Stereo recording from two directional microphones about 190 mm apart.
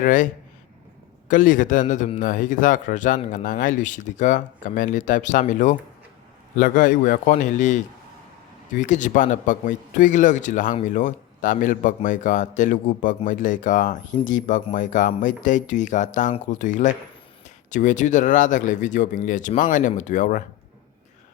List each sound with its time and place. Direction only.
0.0 s a man's voice: 45° left (ahead or behind)
1.3 s a man's voice: 45° left (ahead or behind)
8.8 s a man's voice: 40° left (ahead or behind)